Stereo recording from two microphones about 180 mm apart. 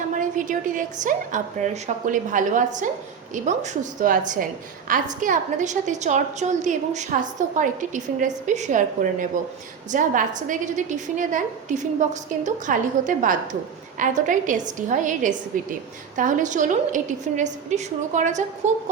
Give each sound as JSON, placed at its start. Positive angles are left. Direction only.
{"t": 0.1, "sound": "a woman's voice", "side_deg": -45}